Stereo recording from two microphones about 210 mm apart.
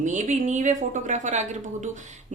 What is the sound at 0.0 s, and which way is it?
Speech, 35° right (ahead or behind).